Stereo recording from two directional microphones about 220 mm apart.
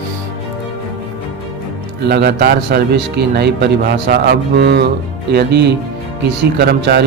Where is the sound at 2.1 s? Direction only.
45° right (ahead or behind).